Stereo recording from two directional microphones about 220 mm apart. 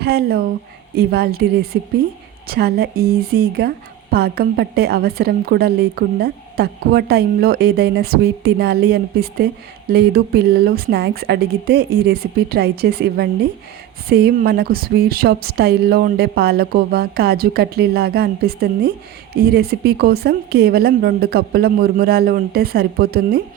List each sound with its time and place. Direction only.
0.0 s a woman's voice: 45° right (ahead or behind)